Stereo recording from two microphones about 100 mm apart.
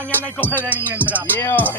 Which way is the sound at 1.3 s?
20° left (ahead or behind).